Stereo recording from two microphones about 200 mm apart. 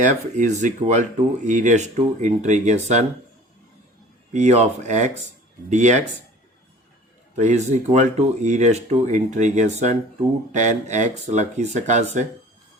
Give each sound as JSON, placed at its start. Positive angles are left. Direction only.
{"t": 0.0, "sound": "speech", "side_deg": -40}
{"t": 4.3, "sound": "speech", "side_deg": -35}
{"t": 7.3, "sound": "speech", "side_deg": -35}